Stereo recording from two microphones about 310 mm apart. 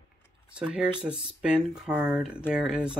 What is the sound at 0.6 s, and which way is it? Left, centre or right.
Speech, centre.